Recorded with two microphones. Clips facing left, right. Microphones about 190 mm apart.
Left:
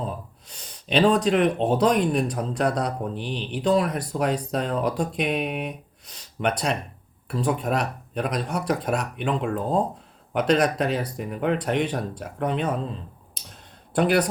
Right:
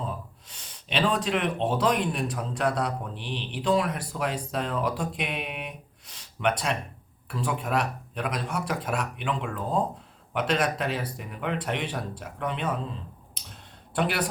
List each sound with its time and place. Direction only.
0.4 s speech: 40° left (ahead or behind)
13.9 s speech: 40° left (ahead or behind)